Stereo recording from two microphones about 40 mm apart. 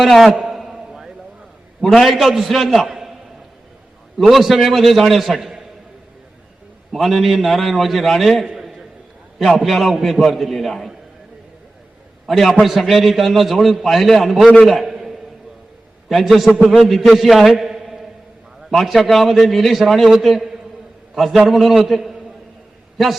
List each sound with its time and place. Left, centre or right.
0.0 s a man's voice: centre
0.5 s a sound: centre
1.8 s a man's voice: centre
4.2 s a man's voice: centre
6.9 s a man's voice: centre
9.6 s a man's voice: centre
12.3 s a man's voice: centre
16.0 s a man's voice: centre
17.5 s a sound: centre
18.7 s a man's voice: centre